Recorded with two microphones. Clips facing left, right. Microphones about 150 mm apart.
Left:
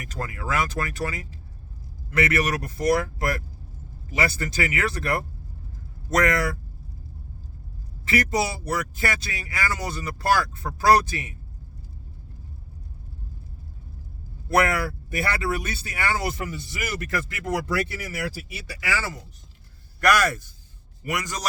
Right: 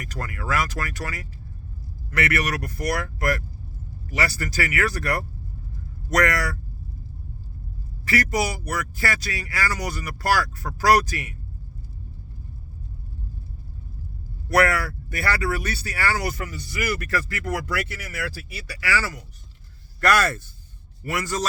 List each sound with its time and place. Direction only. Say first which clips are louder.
0.1 s speech: right 1 dB; 20° left (ahead or behind)
8.0 s speech: even; 20° left (ahead or behind)
14.5 s speech: right 1 dB; 20° left (ahead or behind)
18.7 s speech: right 3 dB; 25° left (ahead or behind)